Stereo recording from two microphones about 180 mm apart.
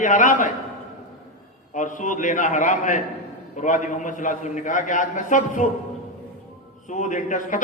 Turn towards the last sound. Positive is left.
turn(degrees=45)  # may be behind; listen again after turning